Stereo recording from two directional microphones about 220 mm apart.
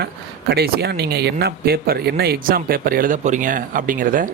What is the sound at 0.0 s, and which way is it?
Speech, 45° right (ahead or behind).